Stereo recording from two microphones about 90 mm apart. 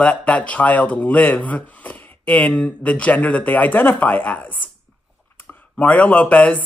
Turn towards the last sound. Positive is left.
turn(degrees=15)  # may be behind; listen again after turning